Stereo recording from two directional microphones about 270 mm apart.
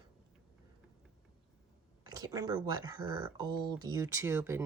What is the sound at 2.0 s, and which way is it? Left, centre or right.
Speech, centre.